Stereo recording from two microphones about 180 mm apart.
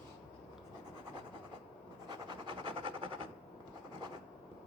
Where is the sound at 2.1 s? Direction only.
25° right (ahead or behind).